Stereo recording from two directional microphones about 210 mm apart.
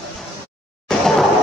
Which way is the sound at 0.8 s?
Centre (ahead or behind).